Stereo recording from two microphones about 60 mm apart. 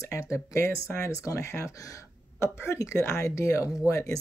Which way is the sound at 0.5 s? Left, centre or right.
Left.